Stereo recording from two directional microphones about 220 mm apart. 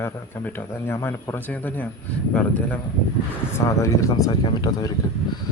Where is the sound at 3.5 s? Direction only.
15° left (ahead or behind).